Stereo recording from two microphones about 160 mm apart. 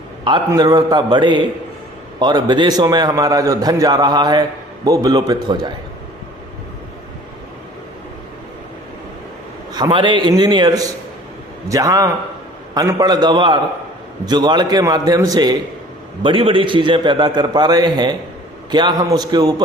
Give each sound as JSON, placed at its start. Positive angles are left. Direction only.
{"t": 0.3, "sound": "a man's voice", "side_deg": -25}
{"t": 9.7, "sound": "a man's voice", "side_deg": -30}